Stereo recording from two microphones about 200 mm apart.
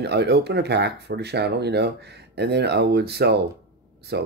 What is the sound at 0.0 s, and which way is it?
Speech, 55° right (ahead or behind).